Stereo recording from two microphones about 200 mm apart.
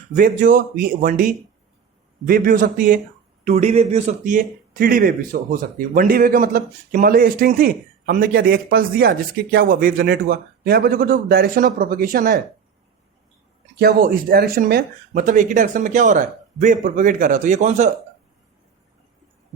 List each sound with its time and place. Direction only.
0.2 s speech: 40° right (ahead or behind)
3.4 s speech: 35° right (ahead or behind)
13.7 s speech: 50° right (ahead or behind)